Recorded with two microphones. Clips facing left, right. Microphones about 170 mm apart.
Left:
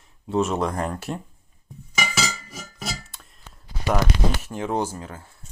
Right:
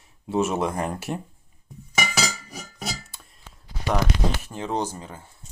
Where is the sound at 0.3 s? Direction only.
5° right (ahead or behind).